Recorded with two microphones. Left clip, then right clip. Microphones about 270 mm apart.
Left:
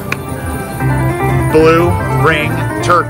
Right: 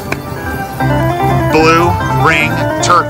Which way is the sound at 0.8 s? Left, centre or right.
Centre.